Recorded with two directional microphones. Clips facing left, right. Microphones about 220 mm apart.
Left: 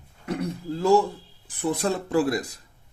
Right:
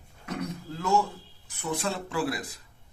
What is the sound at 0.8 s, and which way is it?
A man's voice, 35° left (ahead or behind).